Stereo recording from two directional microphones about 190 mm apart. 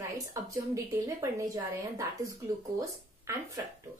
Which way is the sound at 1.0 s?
15° right (ahead or behind).